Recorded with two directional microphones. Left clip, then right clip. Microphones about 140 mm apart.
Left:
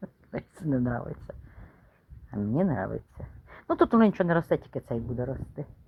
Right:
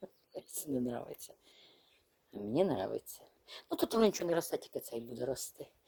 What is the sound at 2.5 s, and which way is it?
A woman's voice, 50° right (ahead or behind).